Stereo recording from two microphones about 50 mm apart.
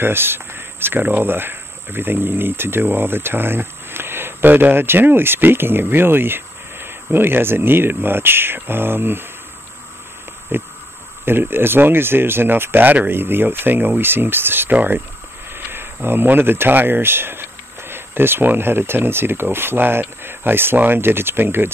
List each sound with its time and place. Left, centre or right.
0.0 s speech: right
10.5 s speech: right
14.7 s speech: right
15.5 s speech: right